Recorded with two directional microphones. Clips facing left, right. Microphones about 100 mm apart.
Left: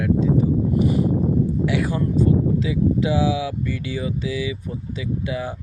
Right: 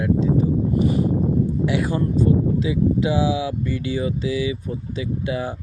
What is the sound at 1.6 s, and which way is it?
Speech, 25° right (ahead or behind).